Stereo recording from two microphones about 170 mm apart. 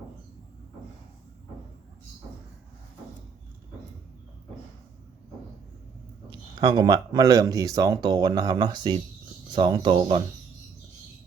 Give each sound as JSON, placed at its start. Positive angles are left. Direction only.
{"t": 6.6, "sound": "speech", "side_deg": -25}